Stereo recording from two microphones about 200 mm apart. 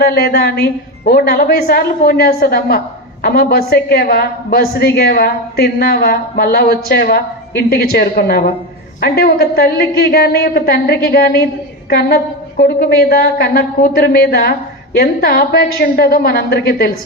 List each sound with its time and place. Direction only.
0.0 s a woman's voice: 50° left (ahead or behind)